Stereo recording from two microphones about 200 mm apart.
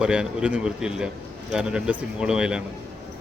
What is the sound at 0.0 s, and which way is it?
A man's voice, 5° right (ahead or behind).